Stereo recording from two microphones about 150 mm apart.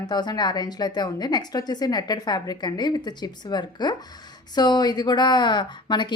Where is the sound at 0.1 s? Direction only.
30° left (ahead or behind).